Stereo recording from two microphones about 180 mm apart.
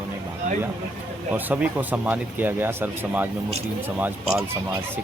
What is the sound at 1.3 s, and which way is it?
Speech, 10° right (ahead or behind).